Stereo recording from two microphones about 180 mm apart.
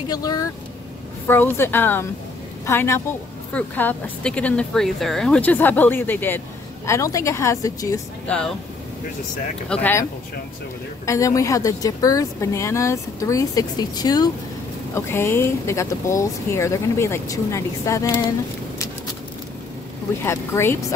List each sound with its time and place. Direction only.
0.1 s speech: 20° left (ahead or behind)
8.3 s speech: 5° left (ahead or behind)
9.7 s speech: 10° left (ahead or behind)
11.1 s speech: 20° left (ahead or behind)
20.2 s speech: 15° left (ahead or behind)